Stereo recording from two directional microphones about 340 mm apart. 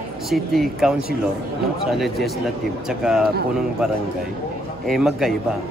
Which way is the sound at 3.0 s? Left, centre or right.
Centre.